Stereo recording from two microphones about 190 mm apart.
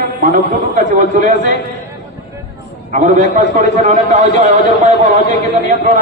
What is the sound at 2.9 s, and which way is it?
A man's voice, 40° right (ahead or behind).